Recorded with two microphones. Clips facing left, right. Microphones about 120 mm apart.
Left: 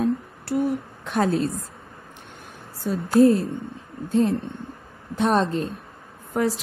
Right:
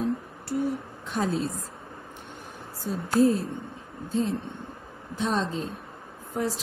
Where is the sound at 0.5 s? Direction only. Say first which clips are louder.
Left 5 dB; 70° left (ahead or behind).